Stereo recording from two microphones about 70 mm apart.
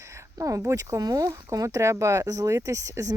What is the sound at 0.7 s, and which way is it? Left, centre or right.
Speech, right.